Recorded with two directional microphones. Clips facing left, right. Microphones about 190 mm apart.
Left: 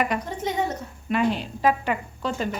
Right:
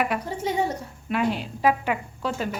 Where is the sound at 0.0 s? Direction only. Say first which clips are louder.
Even; 5° right (ahead or behind).